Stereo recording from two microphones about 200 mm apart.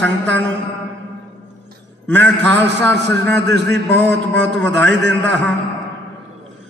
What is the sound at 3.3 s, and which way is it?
A man's voice, 60° right (ahead or behind).